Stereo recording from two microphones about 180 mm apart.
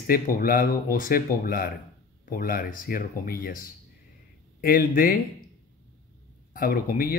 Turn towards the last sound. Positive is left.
turn(degrees=55)  # may be behind; listen again after turning